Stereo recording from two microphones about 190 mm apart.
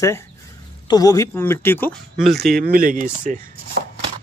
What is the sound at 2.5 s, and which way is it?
Speech, 50° right (ahead or behind).